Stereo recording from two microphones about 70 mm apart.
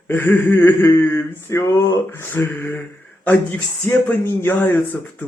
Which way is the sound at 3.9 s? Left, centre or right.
Left.